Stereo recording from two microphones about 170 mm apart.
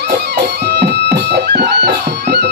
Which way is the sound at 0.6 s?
75° right (ahead or behind).